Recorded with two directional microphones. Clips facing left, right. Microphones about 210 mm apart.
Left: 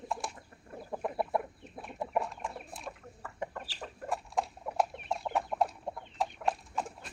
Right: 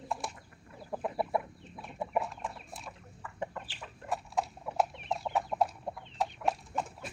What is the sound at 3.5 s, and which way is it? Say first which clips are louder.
Chicken: left 2 dB; 40° left (ahead or behind).